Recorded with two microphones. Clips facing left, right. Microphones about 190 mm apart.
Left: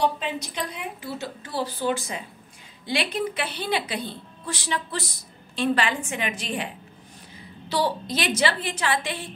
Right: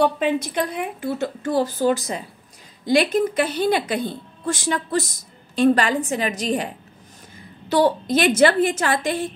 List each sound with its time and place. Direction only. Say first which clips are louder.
0.0 s a woman's voice: right 6 dB; 55° right (ahead or behind)